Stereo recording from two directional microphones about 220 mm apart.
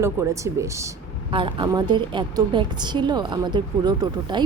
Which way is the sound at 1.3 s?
20° right (ahead or behind).